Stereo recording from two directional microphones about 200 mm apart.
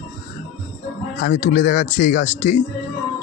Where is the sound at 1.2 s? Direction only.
45° left (ahead or behind).